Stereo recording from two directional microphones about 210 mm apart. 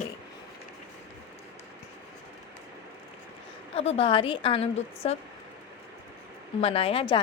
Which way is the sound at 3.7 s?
30° left (ahead or behind).